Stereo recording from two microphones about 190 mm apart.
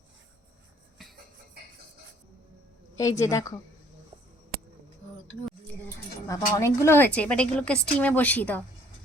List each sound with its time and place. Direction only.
2.9 s a woman's voice: 15° left (ahead or behind)
6.2 s a woman's voice: 15° left (ahead or behind)